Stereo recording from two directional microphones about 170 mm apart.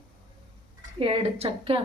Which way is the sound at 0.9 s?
35° right (ahead or behind).